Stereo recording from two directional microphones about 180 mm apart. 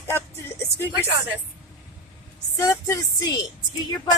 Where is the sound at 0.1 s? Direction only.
15° left (ahead or behind).